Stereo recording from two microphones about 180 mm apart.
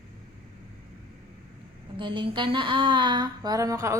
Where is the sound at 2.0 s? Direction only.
25° right (ahead or behind).